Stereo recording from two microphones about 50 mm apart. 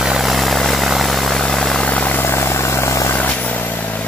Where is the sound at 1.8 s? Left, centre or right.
Left.